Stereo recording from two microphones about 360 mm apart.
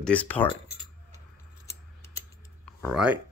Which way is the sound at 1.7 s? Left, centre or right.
Centre.